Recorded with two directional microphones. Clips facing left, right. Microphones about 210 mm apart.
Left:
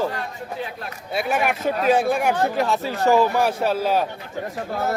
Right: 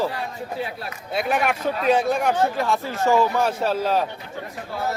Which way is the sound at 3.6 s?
5° left (ahead or behind).